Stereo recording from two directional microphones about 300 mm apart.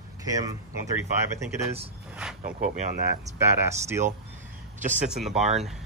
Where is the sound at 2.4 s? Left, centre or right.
Right.